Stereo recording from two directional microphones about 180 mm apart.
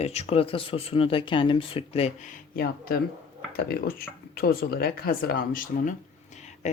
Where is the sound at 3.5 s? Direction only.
55° left (ahead or behind).